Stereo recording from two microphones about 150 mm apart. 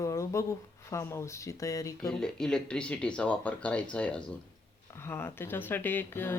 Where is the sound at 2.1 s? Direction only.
5° left (ahead or behind).